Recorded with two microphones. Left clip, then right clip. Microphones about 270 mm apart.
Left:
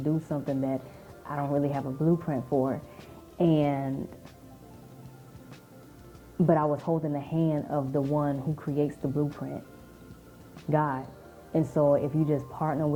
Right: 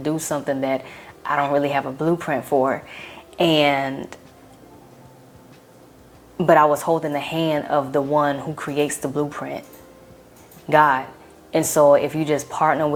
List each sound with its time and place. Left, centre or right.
0.1 s speech: centre
6.4 s speech: centre
6.7 s a woman's voice: right
7.1 s speech: centre
10.7 s speech: centre